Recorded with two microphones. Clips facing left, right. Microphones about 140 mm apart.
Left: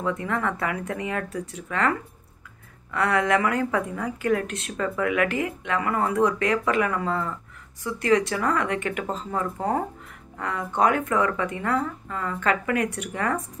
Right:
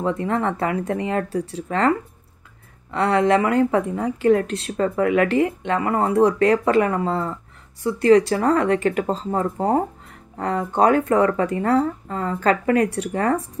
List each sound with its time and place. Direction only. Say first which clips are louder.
0.0 s speech: right 4 dB; 30° right (ahead or behind)